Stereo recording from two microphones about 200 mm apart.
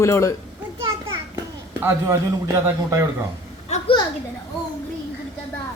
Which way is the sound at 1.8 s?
10° right (ahead or behind).